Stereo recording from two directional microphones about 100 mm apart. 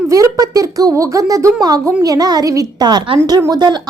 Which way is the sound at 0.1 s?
35° right (ahead or behind).